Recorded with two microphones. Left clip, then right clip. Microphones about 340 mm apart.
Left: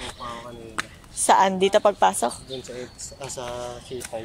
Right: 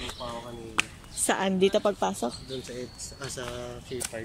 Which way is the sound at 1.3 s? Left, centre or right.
Centre.